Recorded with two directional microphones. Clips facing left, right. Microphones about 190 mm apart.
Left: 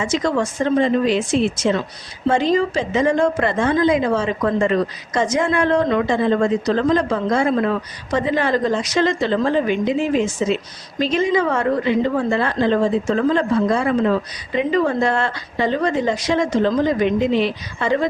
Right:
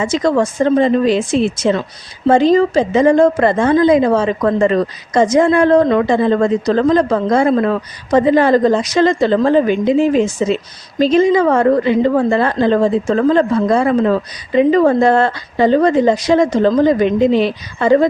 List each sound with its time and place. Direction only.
0.0 s a woman's voice: 35° right (ahead or behind)